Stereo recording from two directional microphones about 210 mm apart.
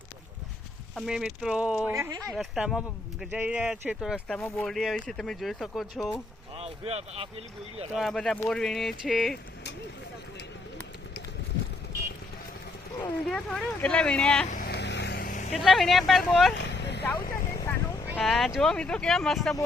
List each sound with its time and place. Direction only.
0.9 s speech: centre (ahead or behind)
2.3 s speech: centre (ahead or behind)
6.6 s speech: 30° right (ahead or behind)
7.9 s speech: centre (ahead or behind)
13.0 s speech: 5° left (ahead or behind)
14.5 s vehicle: 50° left (ahead or behind)
15.5 s speech: centre (ahead or behind)
16.6 s vehicle: 55° left (ahead or behind)
17.7 s speech: 5° left (ahead or behind)